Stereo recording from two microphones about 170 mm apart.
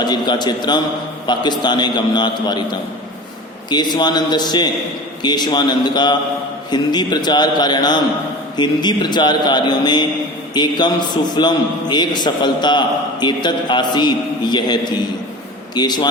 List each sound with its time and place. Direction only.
0.0 s a man's voice: 25° left (ahead or behind)
3.7 s a man's voice: 25° left (ahead or behind)